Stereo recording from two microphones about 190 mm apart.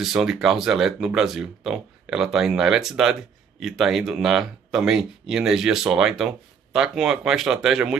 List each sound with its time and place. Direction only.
0.0 s speech: centre (ahead or behind)